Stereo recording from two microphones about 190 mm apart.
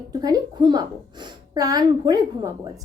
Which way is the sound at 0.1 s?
20° right (ahead or behind).